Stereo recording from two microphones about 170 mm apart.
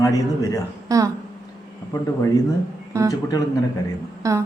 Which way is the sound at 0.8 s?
20° right (ahead or behind).